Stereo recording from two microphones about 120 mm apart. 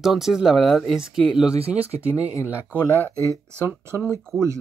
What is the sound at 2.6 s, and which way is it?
Speech, 20° left (ahead or behind).